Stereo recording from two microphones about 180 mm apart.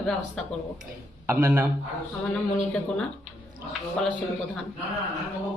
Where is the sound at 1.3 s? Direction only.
15° right (ahead or behind).